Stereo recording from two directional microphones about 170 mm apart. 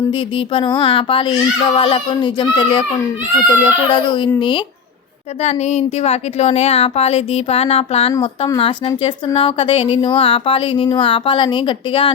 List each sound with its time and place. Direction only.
0.1 s a woman's voice: 30° left (ahead or behind)
5.4 s a woman's voice: 40° left (ahead or behind)